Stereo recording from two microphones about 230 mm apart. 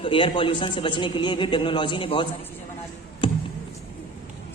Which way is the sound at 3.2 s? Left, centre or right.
Left.